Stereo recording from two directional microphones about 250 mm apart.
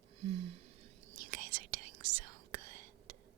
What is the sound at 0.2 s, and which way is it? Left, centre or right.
Whispering, right.